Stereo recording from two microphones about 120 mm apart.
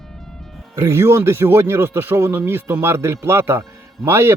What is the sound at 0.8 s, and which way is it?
A man's voice, 25° right (ahead or behind).